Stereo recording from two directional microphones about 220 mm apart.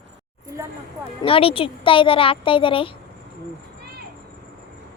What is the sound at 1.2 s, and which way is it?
Speech, 25° left (ahead or behind).